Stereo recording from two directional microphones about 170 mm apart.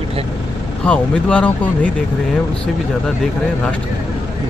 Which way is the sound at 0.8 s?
5° left (ahead or behind).